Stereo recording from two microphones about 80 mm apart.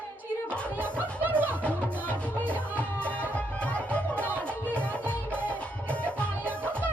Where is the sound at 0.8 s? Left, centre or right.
Right.